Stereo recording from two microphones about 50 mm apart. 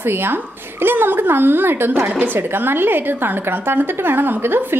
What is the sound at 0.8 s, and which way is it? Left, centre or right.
A woman's voice, right.